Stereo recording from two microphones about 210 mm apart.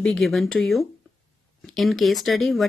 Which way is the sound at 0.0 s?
Centre (ahead or behind).